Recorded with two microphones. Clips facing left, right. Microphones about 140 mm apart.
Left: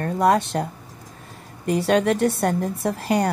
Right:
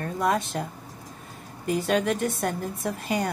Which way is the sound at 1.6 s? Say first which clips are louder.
Left 5 dB; 65° left (ahead or behind).